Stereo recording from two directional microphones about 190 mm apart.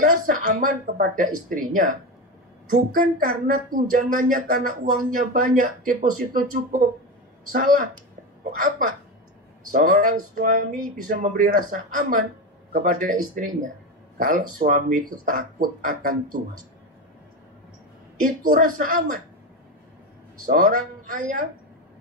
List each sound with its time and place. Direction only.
0.0 s speech: 45° right (ahead or behind)
18.2 s speech: 45° right (ahead or behind)
20.4 s speech: 45° right (ahead or behind)